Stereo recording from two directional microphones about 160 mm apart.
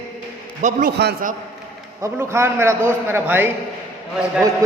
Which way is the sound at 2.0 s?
15° right (ahead or behind).